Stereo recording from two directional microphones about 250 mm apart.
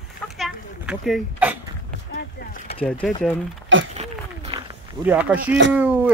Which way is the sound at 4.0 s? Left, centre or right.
Right.